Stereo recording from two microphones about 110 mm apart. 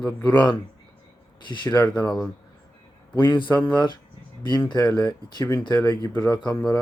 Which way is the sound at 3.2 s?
45° left (ahead or behind).